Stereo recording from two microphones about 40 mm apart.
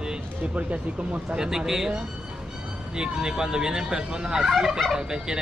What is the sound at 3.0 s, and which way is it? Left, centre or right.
Speech, centre.